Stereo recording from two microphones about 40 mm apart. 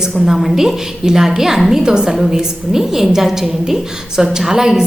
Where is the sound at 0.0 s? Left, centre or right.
Centre.